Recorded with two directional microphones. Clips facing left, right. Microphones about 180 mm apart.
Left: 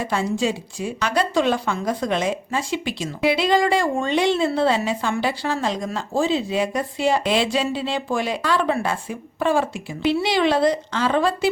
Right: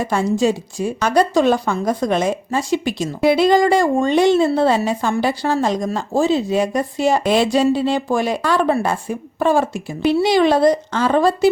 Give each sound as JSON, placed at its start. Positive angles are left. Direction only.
{"t": 0.0, "sound": "a woman's voice", "side_deg": -45}